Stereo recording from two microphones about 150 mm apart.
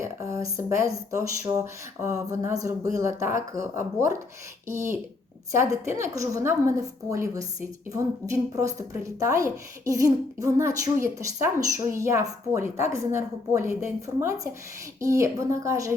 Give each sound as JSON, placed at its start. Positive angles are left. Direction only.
{"t": 0.0, "sound": "a woman's voice", "side_deg": -20}